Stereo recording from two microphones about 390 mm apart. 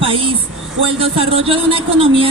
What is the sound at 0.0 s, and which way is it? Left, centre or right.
A woman's voice, centre.